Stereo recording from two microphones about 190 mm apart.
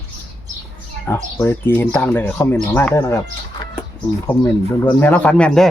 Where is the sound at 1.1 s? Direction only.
10° left (ahead or behind).